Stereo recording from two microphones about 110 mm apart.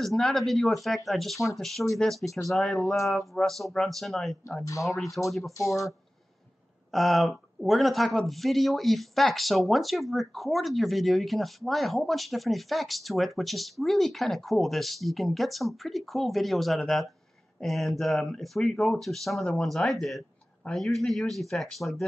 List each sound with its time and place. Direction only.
0.0 s speech: centre (ahead or behind)
4.6 s speech: 30° left (ahead or behind)
5.2 s speech: 5° left (ahead or behind)
5.6 s speech: 30° left (ahead or behind)
6.9 s speech: centre (ahead or behind)